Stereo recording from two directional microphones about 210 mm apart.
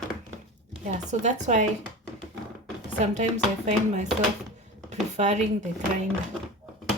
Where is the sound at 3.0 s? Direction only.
35° right (ahead or behind).